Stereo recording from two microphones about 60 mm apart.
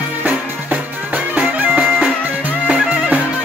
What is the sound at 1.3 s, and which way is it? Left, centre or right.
Music, centre.